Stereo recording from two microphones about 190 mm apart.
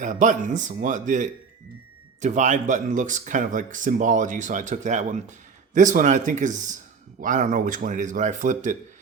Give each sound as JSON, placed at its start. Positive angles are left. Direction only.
{"t": 0.0, "sound": "speech", "side_deg": -40}